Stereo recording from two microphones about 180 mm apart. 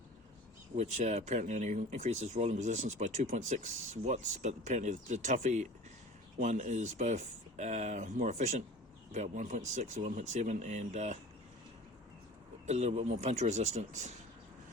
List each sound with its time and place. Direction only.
0.8 s speech: 40° right (ahead or behind)
12.6 s speech: 40° right (ahead or behind)